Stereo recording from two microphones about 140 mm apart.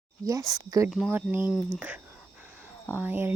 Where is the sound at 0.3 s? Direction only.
25° right (ahead or behind).